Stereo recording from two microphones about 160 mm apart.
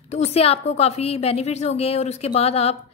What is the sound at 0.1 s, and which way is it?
A woman's voice, 40° left (ahead or behind).